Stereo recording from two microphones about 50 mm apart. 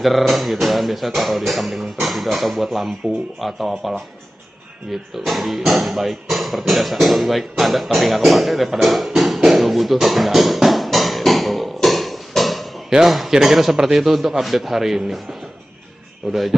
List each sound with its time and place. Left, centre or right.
0.0 s speech: centre
5.2 s speech: centre
9.5 s music: centre
13.0 s speech: centre
16.3 s speech: centre